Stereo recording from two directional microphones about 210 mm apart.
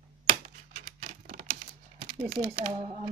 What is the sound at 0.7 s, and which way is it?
Typing, 35° right (ahead or behind).